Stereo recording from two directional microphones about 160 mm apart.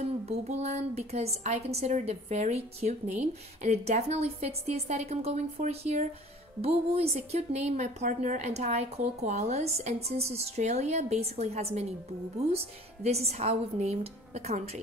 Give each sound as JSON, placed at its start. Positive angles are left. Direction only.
{"t": 0.0, "sound": "a woman's voice", "side_deg": -40}